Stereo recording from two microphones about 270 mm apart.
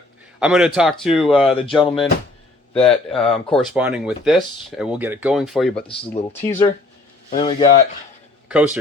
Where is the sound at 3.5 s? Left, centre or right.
Centre.